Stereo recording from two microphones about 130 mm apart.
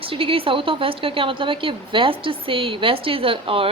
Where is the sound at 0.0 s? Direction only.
45° right (ahead or behind).